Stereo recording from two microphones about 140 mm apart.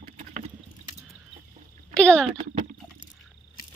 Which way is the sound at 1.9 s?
5° left (ahead or behind).